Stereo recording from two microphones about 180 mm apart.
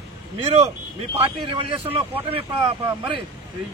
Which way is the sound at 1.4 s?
30° right (ahead or behind).